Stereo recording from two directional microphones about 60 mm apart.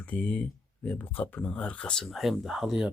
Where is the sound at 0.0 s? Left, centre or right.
Left.